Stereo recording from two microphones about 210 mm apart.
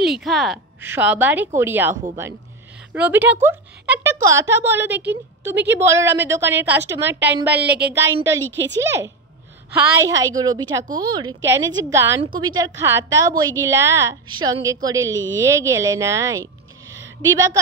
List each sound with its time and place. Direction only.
0.0 s a woman's voice: centre (ahead or behind)
7.5 s speech: 50° right (ahead or behind)
7.9 s a woman's voice: 10° right (ahead or behind)
8.5 s a woman's voice: 60° right (ahead or behind)
9.8 s a woman's voice: 15° right (ahead or behind)
16.9 s a sound: 15° right (ahead or behind)